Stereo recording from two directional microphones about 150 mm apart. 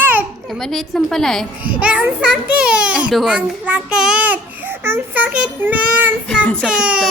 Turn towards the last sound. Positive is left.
turn(degrees=-5)  # may be behind; listen again after turning